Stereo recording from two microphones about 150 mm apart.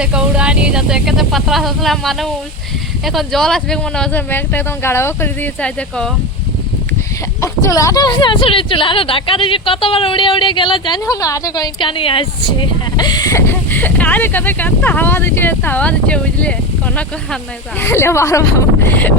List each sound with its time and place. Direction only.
0.0 s speech: 5° right (ahead or behind)
7.4 s speech: 20° left (ahead or behind)